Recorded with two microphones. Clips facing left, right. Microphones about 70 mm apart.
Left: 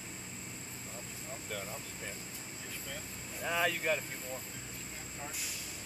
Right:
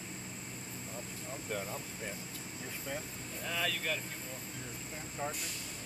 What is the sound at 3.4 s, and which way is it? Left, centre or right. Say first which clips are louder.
Speech: left 4 dB; centre.